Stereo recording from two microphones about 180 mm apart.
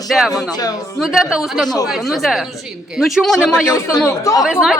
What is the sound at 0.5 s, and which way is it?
Speech, 20° left (ahead or behind).